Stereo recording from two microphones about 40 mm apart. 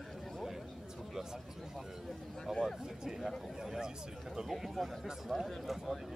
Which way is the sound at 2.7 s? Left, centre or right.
Centre.